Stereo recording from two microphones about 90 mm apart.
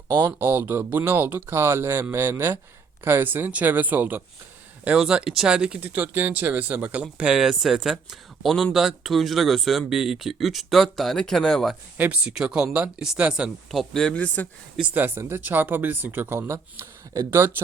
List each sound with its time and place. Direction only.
0.3 s speech: 25° right (ahead or behind)
4.9 s speech: 10° right (ahead or behind)
5.8 s speech: 20° right (ahead or behind); by 11.8 s 5° left (ahead or behind)
11.9 s speech: 15° right (ahead or behind); by 14.4 s 15° left (ahead or behind)
14.8 s speech: 20° right (ahead or behind)